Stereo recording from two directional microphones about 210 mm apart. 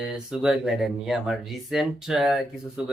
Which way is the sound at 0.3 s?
Centre (ahead or behind).